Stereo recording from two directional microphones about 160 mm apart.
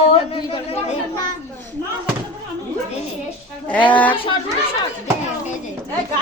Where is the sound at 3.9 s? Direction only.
10° left (ahead or behind).